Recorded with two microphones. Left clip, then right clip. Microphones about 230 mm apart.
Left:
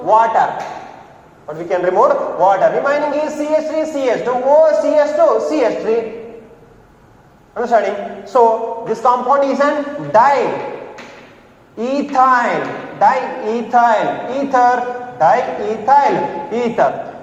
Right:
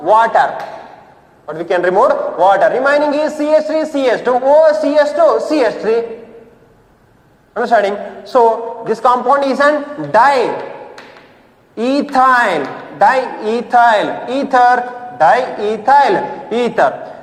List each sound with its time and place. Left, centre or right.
0.0 s a man's voice: right
7.5 s a man's voice: right
11.8 s a man's voice: right